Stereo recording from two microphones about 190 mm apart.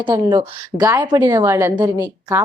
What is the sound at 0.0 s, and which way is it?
A woman's voice, 20° right (ahead or behind).